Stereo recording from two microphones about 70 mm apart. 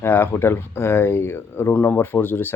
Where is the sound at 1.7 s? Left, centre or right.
Left.